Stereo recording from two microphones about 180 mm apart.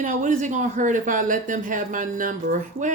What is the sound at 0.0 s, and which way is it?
Speech, 45° right (ahead or behind).